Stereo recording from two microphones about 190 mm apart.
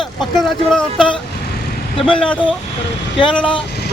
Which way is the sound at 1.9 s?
30° left (ahead or behind).